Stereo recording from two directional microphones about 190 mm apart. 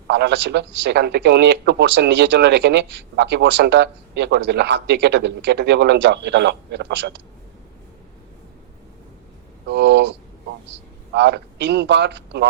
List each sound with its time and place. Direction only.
0.1 s speech: 65° right (ahead or behind)
9.6 s a sound: 65° right (ahead or behind)
11.1 s speech: 65° right (ahead or behind)